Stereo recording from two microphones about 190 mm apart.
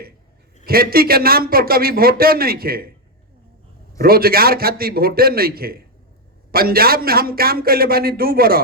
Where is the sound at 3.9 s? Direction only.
50° right (ahead or behind).